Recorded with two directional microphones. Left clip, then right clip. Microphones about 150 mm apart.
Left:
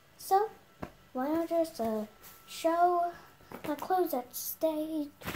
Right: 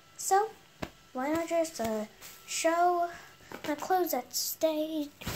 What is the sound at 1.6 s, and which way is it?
Speech, 10° right (ahead or behind).